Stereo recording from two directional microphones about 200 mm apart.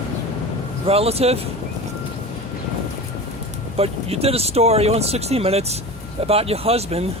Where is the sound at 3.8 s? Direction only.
30° right (ahead or behind).